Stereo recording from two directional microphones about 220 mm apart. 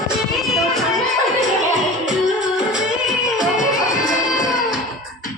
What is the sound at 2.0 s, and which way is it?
Music, 5° right (ahead or behind).